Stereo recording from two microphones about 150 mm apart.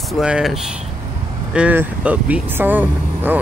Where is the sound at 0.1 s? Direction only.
5° right (ahead or behind).